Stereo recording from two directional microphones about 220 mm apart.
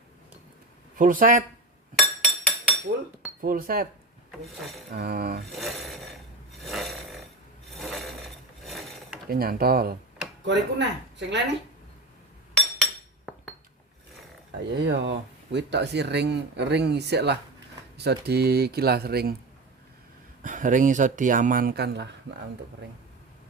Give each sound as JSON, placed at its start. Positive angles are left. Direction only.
{"t": 0.9, "sound": "speech", "side_deg": -40}
{"t": 2.0, "sound": "chink", "side_deg": 5}
{"t": 3.4, "sound": "speech", "side_deg": -40}
{"t": 4.9, "sound": "speech", "side_deg": -45}
{"t": 5.5, "sound": "speech", "side_deg": 0}
{"t": 6.6, "sound": "snoring", "side_deg": 0}
{"t": 7.8, "sound": "filing", "side_deg": 0}
{"t": 9.3, "sound": "speech", "side_deg": -45}
{"t": 13.3, "sound": "chink", "side_deg": 0}
{"t": 14.7, "sound": "speech", "side_deg": -55}
{"t": 20.4, "sound": "speech", "side_deg": -35}